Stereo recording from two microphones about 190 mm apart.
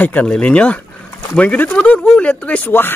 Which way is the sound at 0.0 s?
5° left (ahead or behind).